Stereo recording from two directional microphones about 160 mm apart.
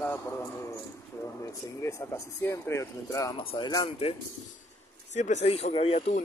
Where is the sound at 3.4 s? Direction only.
35° left (ahead or behind).